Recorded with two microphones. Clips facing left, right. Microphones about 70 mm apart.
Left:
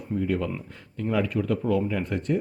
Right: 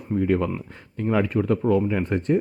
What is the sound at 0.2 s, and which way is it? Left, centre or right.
Speech, right.